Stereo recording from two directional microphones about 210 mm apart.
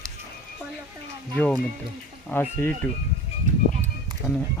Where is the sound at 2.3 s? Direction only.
10° left (ahead or behind).